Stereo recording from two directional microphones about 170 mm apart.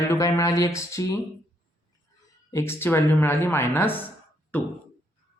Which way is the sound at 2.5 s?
15° left (ahead or behind).